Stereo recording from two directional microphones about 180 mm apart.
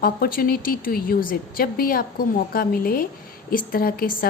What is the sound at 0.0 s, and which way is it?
A woman's voice, 55° left (ahead or behind).